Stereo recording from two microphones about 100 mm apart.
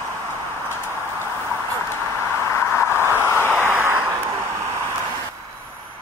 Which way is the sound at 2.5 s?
25° left (ahead or behind).